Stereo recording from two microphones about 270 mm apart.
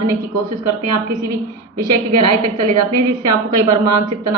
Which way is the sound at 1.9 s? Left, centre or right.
Right.